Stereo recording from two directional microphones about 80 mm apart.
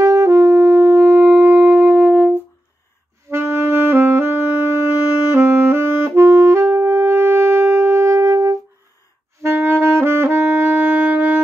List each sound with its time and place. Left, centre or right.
0.0 s music: right; by 2.3 s centre
3.3 s saxophone: right
5.3 s clarinet: right
9.4 s clarinet: right
9.9 s saxophone: right